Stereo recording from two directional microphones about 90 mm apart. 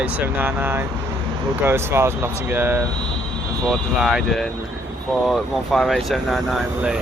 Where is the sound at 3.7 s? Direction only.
10° right (ahead or behind).